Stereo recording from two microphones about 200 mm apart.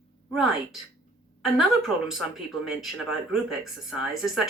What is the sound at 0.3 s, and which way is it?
Speech, centre (ahead or behind).